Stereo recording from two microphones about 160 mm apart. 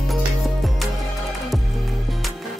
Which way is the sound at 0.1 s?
Centre (ahead or behind).